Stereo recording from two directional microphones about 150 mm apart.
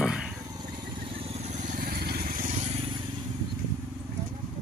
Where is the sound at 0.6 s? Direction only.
30° right (ahead or behind); by 2.5 s 70° right (ahead or behind).